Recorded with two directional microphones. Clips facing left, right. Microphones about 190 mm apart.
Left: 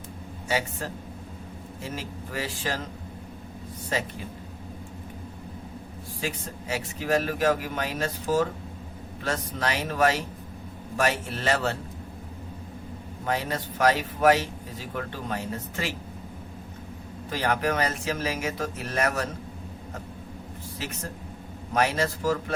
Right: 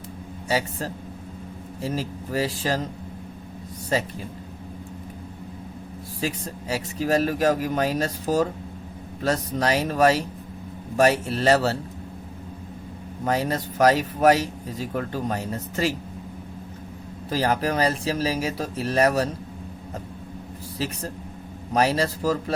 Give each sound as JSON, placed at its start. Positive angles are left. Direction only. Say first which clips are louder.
{"t": 0.4, "sound": "a man's voice", "louder": "right 3 dB", "side_deg": -35}
{"t": 6.1, "sound": "speech", "louder": "right 4 dB", "side_deg": -35}
{"t": 13.2, "sound": "speech", "louder": "right 5 dB", "side_deg": -40}
{"t": 17.2, "sound": "speech", "louder": "right 3 dB", "side_deg": -35}
{"t": 20.7, "sound": "speech", "louder": "right 6 dB", "side_deg": -35}